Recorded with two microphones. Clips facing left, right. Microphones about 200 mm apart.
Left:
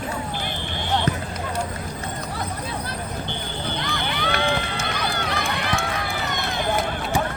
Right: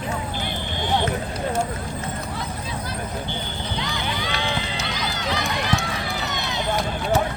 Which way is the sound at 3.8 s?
55° left (ahead or behind).